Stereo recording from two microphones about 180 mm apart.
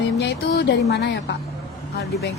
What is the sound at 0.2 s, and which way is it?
Speech, 70° left (ahead or behind).